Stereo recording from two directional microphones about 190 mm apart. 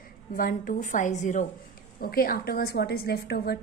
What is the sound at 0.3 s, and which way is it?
A woman's voice, 50° left (ahead or behind).